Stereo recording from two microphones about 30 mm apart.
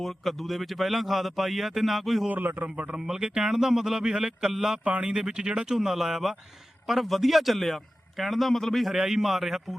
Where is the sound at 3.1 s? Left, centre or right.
Right.